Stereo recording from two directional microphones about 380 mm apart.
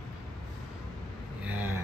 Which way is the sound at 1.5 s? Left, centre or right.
Centre.